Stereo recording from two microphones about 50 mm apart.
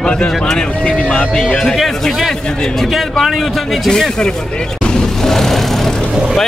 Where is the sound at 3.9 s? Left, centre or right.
Centre.